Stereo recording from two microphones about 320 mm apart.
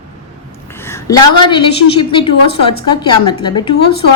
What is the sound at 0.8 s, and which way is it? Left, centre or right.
A woman's voice, centre.